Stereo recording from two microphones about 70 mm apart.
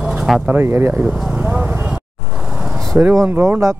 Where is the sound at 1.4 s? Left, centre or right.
Right.